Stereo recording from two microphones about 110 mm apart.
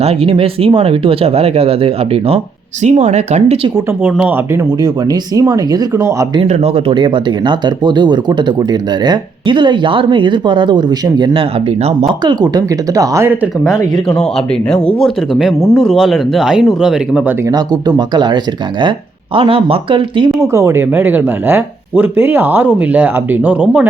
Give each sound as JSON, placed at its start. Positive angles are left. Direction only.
{"t": 0.0, "sound": "speech", "side_deg": -60}
{"t": 2.8, "sound": "speech", "side_deg": -90}
{"t": 4.0, "sound": "speech", "side_deg": -15}
{"t": 4.8, "sound": "speech", "side_deg": -35}
{"t": 6.5, "sound": "speech", "side_deg": -75}
{"t": 6.9, "sound": "speech", "side_deg": -45}
{"t": 13.9, "sound": "speech", "side_deg": 5}
{"t": 17.5, "sound": "speech", "side_deg": -40}
{"t": 20.4, "sound": "speech", "side_deg": -25}